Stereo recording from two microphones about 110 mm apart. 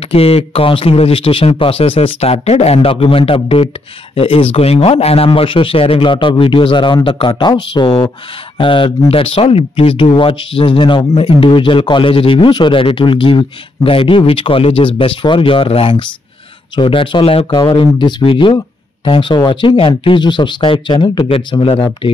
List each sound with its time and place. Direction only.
0.1 s a man's voice: 65° left (ahead or behind); by 21.8 s 45° left (ahead or behind)